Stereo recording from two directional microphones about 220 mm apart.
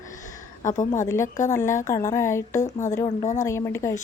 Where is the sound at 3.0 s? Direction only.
30° left (ahead or behind).